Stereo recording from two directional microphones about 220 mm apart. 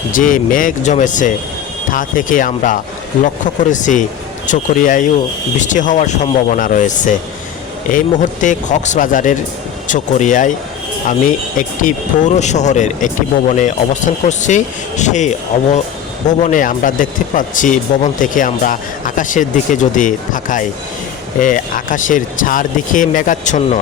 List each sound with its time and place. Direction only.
0.1 s speech: 35° left (ahead or behind)
11.8 s speech: 35° left (ahead or behind)